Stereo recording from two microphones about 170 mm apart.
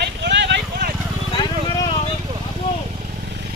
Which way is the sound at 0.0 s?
90° right.